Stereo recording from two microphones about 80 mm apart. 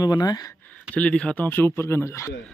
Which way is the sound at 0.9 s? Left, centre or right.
Centre.